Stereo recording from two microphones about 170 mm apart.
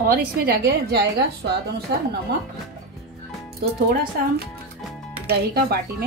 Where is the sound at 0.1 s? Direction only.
65° right (ahead or behind).